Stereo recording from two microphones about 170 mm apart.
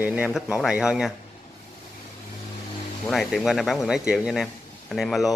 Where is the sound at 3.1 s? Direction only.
Centre (ahead or behind).